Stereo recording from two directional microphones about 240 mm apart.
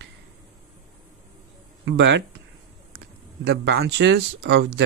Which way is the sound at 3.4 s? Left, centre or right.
Right.